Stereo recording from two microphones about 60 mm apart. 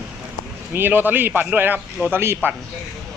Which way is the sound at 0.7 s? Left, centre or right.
Right.